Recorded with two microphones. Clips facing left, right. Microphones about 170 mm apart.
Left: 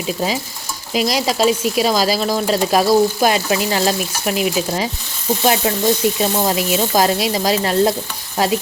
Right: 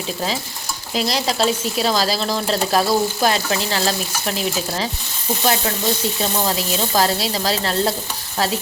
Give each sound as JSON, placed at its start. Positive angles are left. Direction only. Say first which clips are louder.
{"t": 0.9, "sound": "speech", "louder": "left 3 dB", "side_deg": 10}
{"t": 5.4, "sound": "frying", "louder": "left 3 dB", "side_deg": 20}
{"t": 6.3, "sound": "speech", "louder": "left 4 dB", "side_deg": 15}